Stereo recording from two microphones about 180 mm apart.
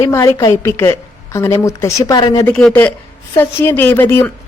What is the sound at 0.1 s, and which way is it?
A woman's voice, 15° left (ahead or behind).